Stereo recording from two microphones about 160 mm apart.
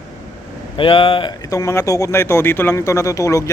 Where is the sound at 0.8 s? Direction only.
35° left (ahead or behind).